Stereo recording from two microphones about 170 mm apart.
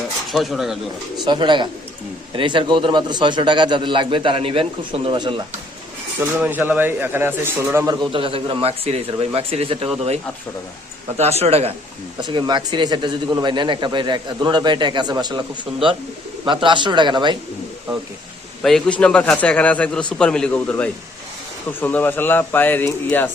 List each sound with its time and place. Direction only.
0.3 s speech: centre (ahead or behind)
1.2 s a man's voice: 25° right (ahead or behind)
6.1 s a man's voice: 10° right (ahead or behind)
8.1 s speech: 30° right (ahead or behind)
11.2 s speech: 40° right (ahead or behind)
12.2 s a man's voice: 25° right (ahead or behind)
18.6 s speech: 5° left (ahead or behind)